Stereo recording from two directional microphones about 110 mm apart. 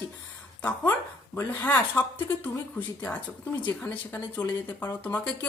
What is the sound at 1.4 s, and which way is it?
Speech, 20° left (ahead or behind).